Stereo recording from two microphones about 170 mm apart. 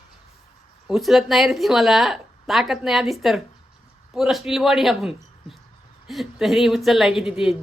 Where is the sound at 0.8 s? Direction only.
Centre (ahead or behind).